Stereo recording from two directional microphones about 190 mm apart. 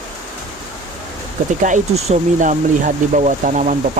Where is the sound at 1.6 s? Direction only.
40° right (ahead or behind).